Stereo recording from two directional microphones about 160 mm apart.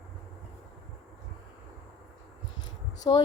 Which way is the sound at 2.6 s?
25° left (ahead or behind).